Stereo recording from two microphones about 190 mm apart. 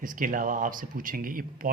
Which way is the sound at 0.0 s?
45° right (ahead or behind).